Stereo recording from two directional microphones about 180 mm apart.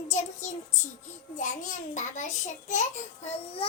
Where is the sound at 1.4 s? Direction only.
45° left (ahead or behind).